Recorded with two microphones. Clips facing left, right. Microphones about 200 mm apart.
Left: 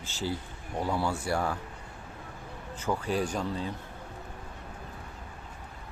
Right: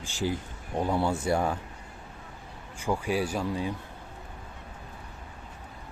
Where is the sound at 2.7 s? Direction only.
10° right (ahead or behind).